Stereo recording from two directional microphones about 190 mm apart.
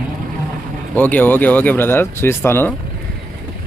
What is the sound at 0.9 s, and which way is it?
Speech, 10° left (ahead or behind).